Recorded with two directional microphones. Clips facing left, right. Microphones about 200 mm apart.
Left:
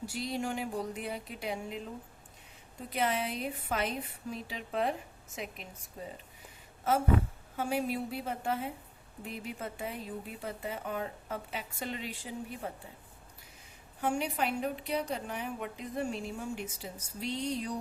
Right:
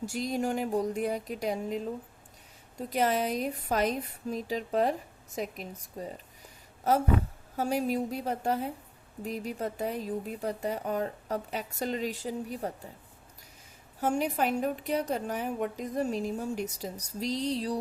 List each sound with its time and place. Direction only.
0.0 s a woman's voice: 45° right (ahead or behind)
7.5 s a woman's voice: 40° right (ahead or behind)
14.0 s a woman's voice: 40° right (ahead or behind)